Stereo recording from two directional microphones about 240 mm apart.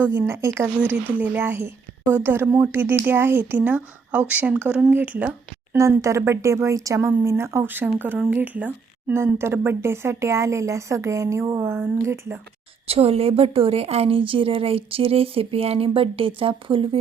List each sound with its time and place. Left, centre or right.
0.0 s speech: centre
12.9 s a woman's voice: right